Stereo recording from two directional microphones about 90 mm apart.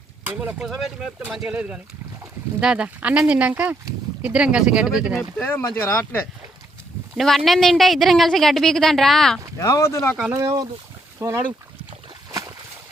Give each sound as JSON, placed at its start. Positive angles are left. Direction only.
{"t": 0.3, "sound": "speech", "side_deg": -20}
{"t": 0.6, "sound": "a woman's voice", "side_deg": -5}
{"t": 5.4, "sound": "speech", "side_deg": 20}
{"t": 7.2, "sound": "a woman's voice", "side_deg": 0}
{"t": 9.6, "sound": "speech", "side_deg": 35}
{"t": 10.3, "sound": "speech", "side_deg": -35}